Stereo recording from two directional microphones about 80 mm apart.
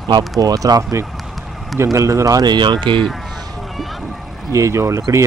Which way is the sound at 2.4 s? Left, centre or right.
Right.